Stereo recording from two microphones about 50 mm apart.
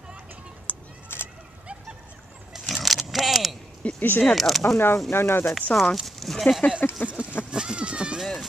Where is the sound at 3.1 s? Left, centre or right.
Centre.